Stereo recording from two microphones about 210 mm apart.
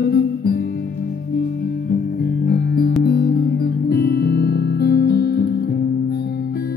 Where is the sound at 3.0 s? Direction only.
50° left (ahead or behind).